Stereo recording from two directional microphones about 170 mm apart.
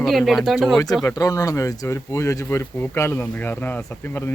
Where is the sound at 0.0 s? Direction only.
Centre (ahead or behind).